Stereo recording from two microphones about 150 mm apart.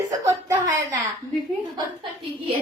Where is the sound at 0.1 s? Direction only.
20° right (ahead or behind).